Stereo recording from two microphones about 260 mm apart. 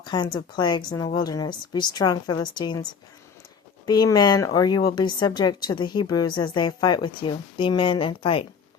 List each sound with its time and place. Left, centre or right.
0.0 s a sound: centre
0.3 s a woman's voice: centre
3.8 s a woman's voice: centre